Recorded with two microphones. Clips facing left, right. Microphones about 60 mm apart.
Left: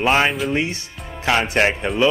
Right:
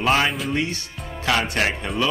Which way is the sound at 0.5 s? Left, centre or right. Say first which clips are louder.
Left 2 dB; left.